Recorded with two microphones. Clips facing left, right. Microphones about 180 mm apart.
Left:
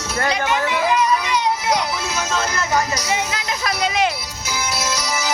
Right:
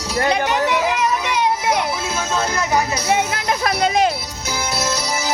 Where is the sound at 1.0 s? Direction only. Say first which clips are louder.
Even; 50° right (ahead or behind).